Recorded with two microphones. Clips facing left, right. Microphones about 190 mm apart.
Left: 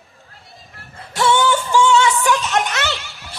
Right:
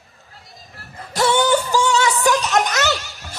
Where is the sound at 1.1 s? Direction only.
40° right (ahead or behind).